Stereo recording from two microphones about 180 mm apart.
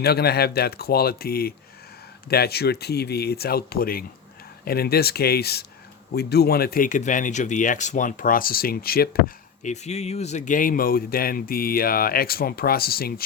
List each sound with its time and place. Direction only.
0.0 s speech: 60° left (ahead or behind)
9.6 s speech: 40° left (ahead or behind); by 13.2 s 55° left (ahead or behind)